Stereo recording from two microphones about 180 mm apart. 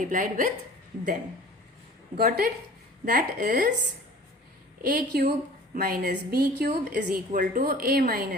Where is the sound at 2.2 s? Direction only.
55° right (ahead or behind).